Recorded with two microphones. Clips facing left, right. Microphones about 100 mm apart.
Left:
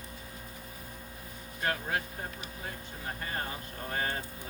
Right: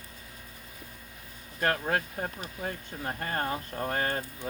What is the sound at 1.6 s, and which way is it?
Speech, 50° right (ahead or behind).